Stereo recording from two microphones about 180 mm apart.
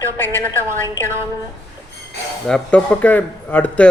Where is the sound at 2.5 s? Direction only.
5° left (ahead or behind).